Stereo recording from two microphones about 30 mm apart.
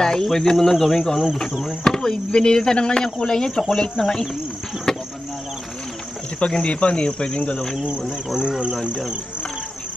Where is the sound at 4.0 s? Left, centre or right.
Centre.